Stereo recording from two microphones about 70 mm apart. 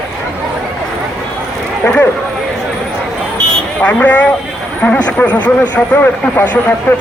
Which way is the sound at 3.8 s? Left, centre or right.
Left.